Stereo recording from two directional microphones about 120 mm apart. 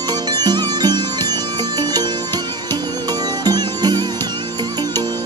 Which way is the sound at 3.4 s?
35° right (ahead or behind).